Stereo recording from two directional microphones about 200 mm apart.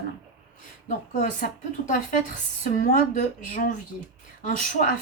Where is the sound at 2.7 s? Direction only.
40° left (ahead or behind).